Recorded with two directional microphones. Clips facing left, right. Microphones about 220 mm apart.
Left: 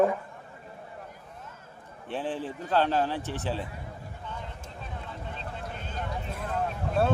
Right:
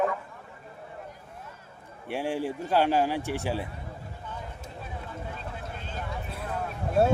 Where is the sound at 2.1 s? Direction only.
10° right (ahead or behind).